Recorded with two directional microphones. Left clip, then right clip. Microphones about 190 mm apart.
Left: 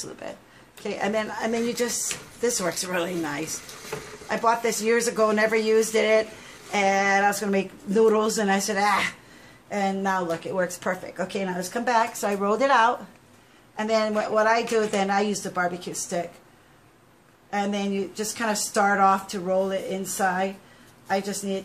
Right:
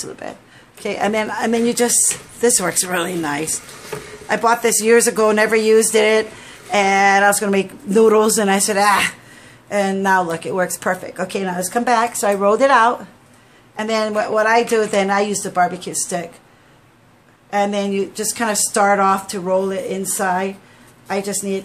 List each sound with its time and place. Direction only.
0.2 s speech: 35° right (ahead or behind)
17.5 s speech: 40° right (ahead or behind)